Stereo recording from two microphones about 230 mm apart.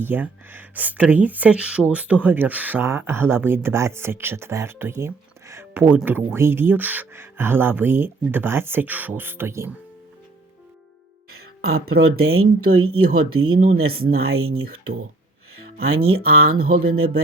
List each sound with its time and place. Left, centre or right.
0.0 s speech: centre
11.3 s speech: right
15.5 s music: right
16.0 s speech: right